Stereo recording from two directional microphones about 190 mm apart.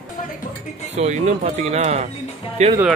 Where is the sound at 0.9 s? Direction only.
35° right (ahead or behind).